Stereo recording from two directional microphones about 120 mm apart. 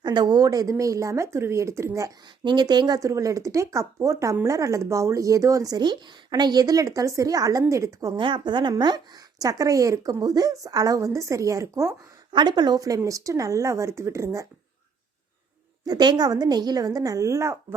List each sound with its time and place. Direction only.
0.0 s speech: 40° right (ahead or behind)
2.4 s speech: 40° right (ahead or behind)
8.1 s a woman's voice: 40° right (ahead or behind); by 11.9 s 25° right (ahead or behind)
12.3 s speech: 40° right (ahead or behind)
15.9 s a woman's voice: 35° right (ahead or behind)